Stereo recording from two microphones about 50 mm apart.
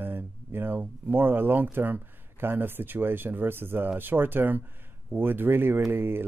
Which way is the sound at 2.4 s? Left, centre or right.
Right.